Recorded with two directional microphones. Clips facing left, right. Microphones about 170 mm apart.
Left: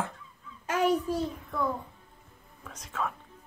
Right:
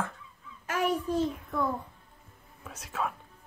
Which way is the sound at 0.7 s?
35° left (ahead or behind).